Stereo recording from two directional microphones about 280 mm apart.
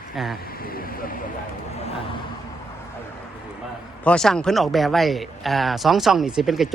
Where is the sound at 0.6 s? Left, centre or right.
Left.